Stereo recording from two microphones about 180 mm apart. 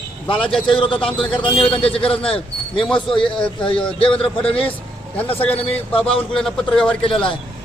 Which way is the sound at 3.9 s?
30° left (ahead or behind).